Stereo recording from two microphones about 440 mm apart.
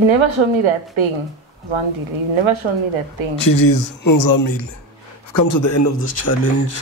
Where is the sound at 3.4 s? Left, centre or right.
Left.